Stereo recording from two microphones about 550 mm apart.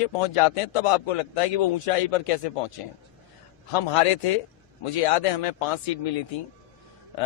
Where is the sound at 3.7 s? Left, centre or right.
Left.